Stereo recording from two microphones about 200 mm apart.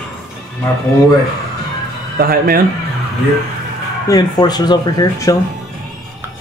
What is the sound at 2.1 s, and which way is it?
Speech, 45° right (ahead or behind).